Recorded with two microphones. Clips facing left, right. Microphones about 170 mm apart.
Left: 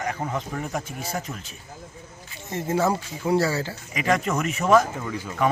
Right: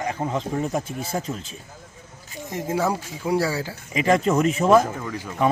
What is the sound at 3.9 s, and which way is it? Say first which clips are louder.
Speech: right 5 dB; 30° right (ahead or behind).